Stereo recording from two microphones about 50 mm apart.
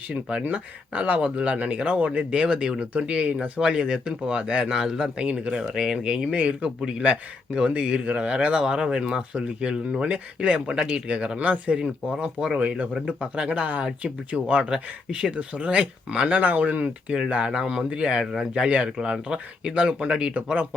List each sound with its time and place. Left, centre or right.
0.1 s a man's voice: centre
1.0 s a man's voice: right
4.7 s speech: centre
5.1 s speech: right
6.3 s a man's voice: right
11.8 s a man's voice: centre
16.4 s speech: right
17.2 s speech: centre